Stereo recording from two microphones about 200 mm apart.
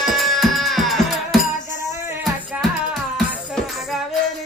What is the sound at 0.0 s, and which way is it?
Music, centre (ahead or behind).